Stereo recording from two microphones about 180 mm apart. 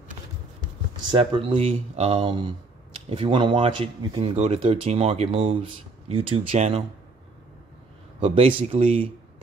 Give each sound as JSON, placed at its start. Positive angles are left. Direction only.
{"t": 1.0, "sound": "speech", "side_deg": -25}
{"t": 8.2, "sound": "speech", "side_deg": -30}